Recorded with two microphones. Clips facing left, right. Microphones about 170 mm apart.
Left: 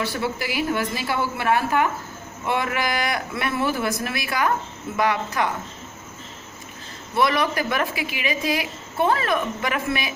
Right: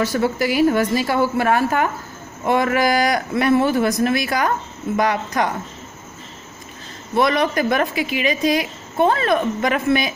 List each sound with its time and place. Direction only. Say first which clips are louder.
0.0 s a woman's voice: right 7 dB; 45° right (ahead or behind)
7.2 s speech: right 4 dB; 35° right (ahead or behind)